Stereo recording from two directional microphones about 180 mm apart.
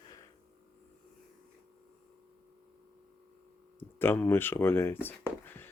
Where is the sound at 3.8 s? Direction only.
10° left (ahead or behind).